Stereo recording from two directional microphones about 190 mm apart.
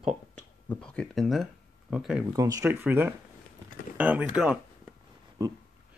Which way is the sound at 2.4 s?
20° right (ahead or behind).